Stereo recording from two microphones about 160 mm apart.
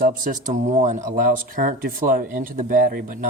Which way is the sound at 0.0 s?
55° right (ahead or behind).